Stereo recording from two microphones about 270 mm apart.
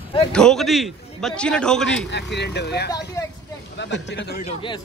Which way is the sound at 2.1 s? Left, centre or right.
Left.